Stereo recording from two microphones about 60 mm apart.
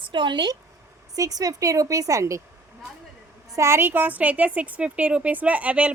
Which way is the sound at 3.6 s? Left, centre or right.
Right.